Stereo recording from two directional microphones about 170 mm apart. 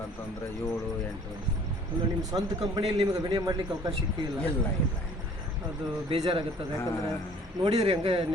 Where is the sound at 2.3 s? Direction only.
25° right (ahead or behind).